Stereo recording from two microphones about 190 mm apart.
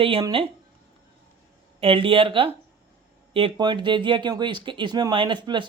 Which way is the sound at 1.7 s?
30° right (ahead or behind).